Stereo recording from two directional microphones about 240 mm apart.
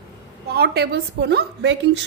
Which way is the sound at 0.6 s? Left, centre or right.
Right.